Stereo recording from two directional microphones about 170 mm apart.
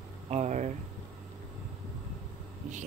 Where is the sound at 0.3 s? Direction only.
45° right (ahead or behind).